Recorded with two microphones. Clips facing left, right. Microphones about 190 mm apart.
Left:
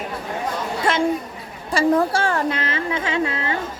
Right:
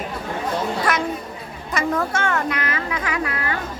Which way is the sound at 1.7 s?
30° left (ahead or behind).